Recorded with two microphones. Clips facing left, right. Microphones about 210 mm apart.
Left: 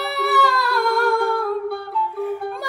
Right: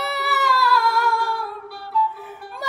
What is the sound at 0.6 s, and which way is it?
Music, 55° left (ahead or behind).